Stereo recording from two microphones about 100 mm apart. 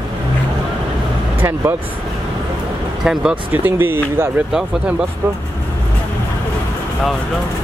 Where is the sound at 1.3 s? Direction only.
20° right (ahead or behind).